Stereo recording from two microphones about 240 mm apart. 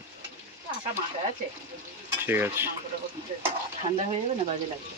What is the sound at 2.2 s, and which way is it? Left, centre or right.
Speech, centre.